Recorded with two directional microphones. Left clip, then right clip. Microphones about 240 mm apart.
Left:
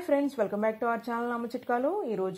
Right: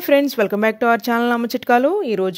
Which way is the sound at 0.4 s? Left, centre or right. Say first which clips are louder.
Right 11 dB; right.